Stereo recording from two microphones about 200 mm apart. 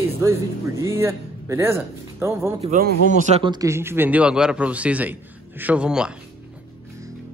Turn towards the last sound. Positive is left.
turn(degrees=-5)  # may be behind; listen again after turning